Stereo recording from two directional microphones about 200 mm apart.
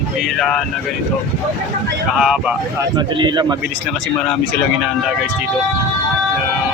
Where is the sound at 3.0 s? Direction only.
20° right (ahead or behind).